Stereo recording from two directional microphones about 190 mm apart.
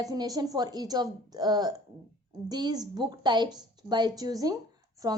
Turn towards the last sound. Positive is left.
turn(degrees=-20)  # may be behind; listen again after turning